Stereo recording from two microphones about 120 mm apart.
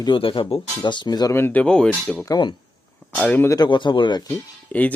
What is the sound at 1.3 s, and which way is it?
Speech, 15° left (ahead or behind).